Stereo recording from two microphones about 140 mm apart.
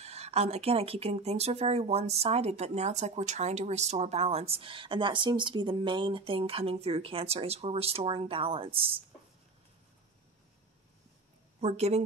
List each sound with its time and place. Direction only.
0.0 s speech: 50° right (ahead or behind)
11.6 s speech: 50° right (ahead or behind)